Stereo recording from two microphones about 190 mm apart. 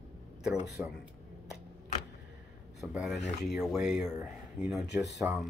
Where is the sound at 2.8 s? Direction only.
Centre (ahead or behind).